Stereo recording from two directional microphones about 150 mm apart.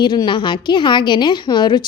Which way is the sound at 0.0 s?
30° left (ahead or behind).